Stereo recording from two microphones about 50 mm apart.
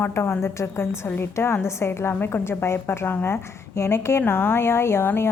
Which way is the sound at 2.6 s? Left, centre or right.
Left.